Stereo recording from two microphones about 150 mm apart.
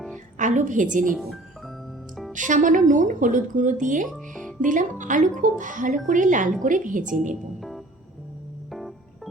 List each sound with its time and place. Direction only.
0.3 s a woman's voice: 55° right (ahead or behind)
1.1 s music: centre (ahead or behind)
2.3 s speech: 60° right (ahead or behind)
4.0 s speech: centre (ahead or behind)
4.6 s speech: 60° right (ahead or behind)
8.7 s music: centre (ahead or behind)